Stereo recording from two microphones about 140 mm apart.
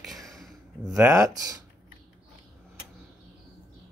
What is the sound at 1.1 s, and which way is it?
Speech, 25° right (ahead or behind).